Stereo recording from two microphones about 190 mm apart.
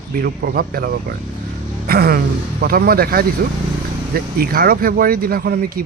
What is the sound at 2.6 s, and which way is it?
A man's voice, 50° right (ahead or behind).